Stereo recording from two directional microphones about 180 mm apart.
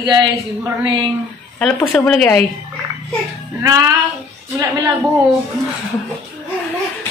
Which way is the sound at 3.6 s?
20° right (ahead or behind).